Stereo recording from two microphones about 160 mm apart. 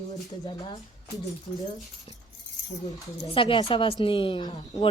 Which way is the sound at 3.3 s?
35° left (ahead or behind).